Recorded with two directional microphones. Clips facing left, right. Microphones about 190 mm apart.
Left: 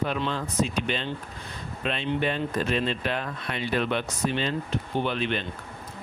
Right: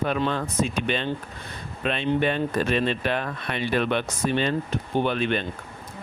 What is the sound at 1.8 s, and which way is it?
Speech, 60° right (ahead or behind).